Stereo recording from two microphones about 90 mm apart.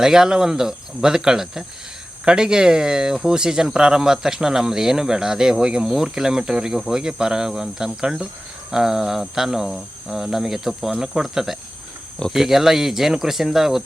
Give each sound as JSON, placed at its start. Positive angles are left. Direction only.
{"t": 0.0, "sound": "speech", "side_deg": -5}
{"t": 8.7, "sound": "cricket", "side_deg": -5}